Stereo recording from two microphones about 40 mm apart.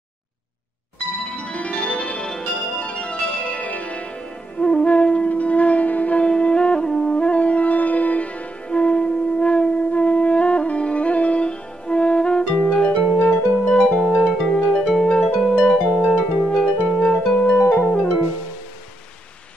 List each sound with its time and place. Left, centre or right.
1.1 s music: centre
2.2 s music: centre
2.7 s music: left
3.6 s music: left
4.6 s music: centre
4.8 s music: left
6.2 s music: left
7.2 s music: left
8.6 s music: left
15.2 s music: centre
15.6 s music: left
16.0 s music: left
16.5 s harp: left
17.6 s music: left